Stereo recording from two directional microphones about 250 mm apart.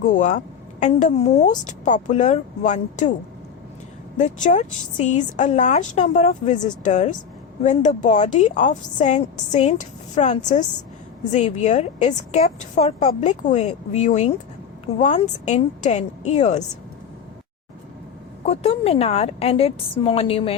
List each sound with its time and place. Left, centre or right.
0.0 s a woman's voice: left
4.2 s a woman's voice: left
18.4 s a woman's voice: left